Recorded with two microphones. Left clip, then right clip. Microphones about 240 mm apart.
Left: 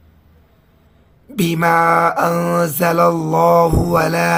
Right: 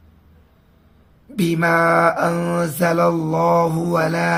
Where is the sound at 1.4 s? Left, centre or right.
Left.